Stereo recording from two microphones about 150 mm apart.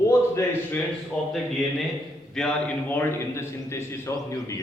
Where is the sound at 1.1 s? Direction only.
5° left (ahead or behind).